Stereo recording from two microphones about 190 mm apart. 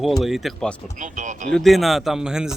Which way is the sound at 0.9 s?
40° right (ahead or behind).